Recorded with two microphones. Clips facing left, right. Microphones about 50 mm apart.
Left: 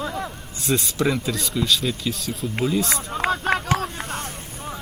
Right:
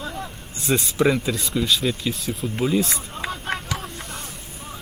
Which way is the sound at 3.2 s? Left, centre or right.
Left.